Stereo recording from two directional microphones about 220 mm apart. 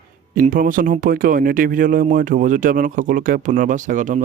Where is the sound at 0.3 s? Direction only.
40° right (ahead or behind).